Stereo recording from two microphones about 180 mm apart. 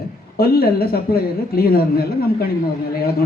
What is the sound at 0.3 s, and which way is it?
A man's voice, 60° left (ahead or behind).